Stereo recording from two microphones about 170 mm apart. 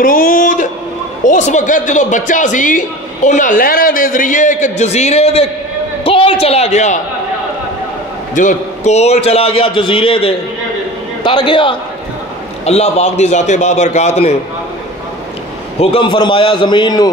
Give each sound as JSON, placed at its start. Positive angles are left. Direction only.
{"t": 0.0, "sound": "a woman's voice", "side_deg": 55}
{"t": 8.4, "sound": "a man's voice", "side_deg": 45}
{"t": 15.8, "sound": "a man's voice", "side_deg": 30}